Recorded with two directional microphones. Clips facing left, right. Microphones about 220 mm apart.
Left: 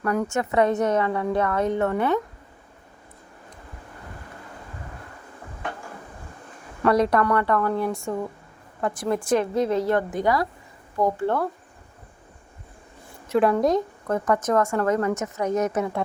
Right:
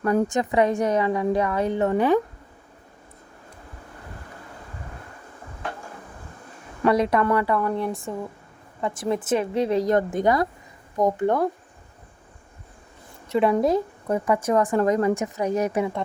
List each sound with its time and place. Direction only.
0.0 s a woman's voice: 30° right (ahead or behind)
0.3 s speech: 15° right (ahead or behind)
6.8 s speech: 5° right (ahead or behind)
9.6 s a woman's voice: 35° right (ahead or behind)
10.2 s a woman's voice: 50° right (ahead or behind)
10.9 s speech: 20° right (ahead or behind)
13.2 s speech: centre (ahead or behind)